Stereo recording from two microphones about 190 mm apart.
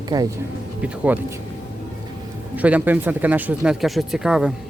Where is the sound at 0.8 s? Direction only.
10° right (ahead or behind).